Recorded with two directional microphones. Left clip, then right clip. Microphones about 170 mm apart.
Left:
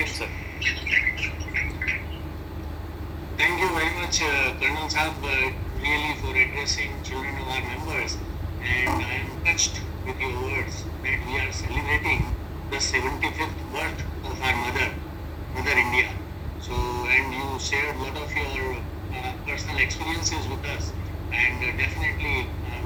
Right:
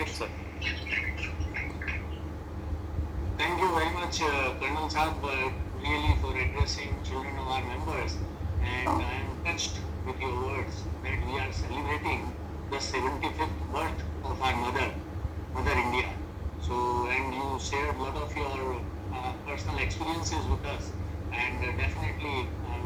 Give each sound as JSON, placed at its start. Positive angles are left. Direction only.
{"t": 0.2, "sound": "a sound", "side_deg": 25}
{"t": 3.3, "sound": "a man's voice", "side_deg": 20}
{"t": 16.7, "sound": "music", "side_deg": 10}
{"t": 17.7, "sound": "speech", "side_deg": 15}
{"t": 21.3, "sound": "speech", "side_deg": 15}